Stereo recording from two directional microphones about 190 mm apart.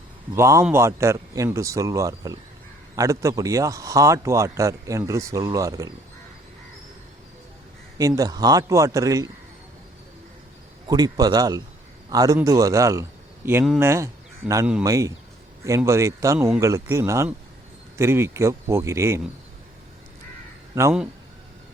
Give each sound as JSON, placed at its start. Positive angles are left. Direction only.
{"t": 0.3, "sound": "speech", "side_deg": -15}
{"t": 7.9, "sound": "speech", "side_deg": -20}
{"t": 10.8, "sound": "a man's voice", "side_deg": -20}